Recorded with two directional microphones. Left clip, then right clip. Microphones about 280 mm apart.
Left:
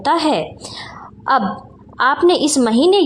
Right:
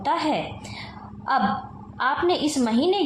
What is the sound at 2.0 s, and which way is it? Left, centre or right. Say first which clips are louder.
A woman's voice: left 9 dB; left.